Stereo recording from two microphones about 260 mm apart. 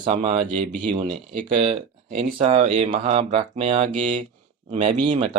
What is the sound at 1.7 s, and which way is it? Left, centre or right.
Speech, right.